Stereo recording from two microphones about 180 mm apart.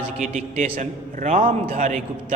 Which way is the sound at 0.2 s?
40° right (ahead or behind).